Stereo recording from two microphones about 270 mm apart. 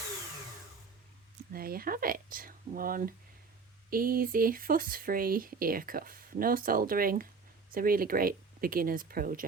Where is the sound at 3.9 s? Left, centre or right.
Right.